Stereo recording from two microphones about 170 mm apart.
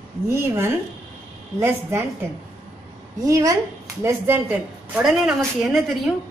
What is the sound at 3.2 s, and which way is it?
A woman's voice, 20° right (ahead or behind).